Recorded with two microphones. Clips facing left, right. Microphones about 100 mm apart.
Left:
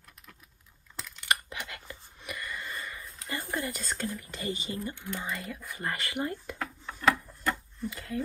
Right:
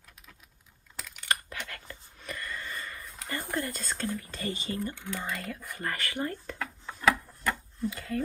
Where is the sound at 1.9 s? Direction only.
15° left (ahead or behind).